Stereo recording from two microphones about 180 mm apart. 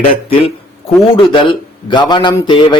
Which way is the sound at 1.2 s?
25° left (ahead or behind).